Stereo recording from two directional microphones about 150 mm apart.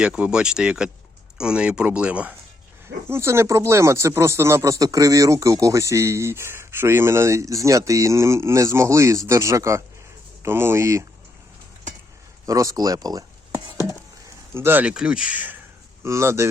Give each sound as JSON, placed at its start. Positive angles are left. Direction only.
{"t": 0.0, "sound": "speech", "side_deg": -5}
{"t": 12.5, "sound": "speech", "side_deg": -20}
{"t": 14.5, "sound": "speech", "side_deg": -15}